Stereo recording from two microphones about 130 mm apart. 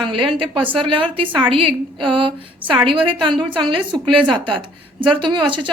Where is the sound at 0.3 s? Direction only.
40° right (ahead or behind).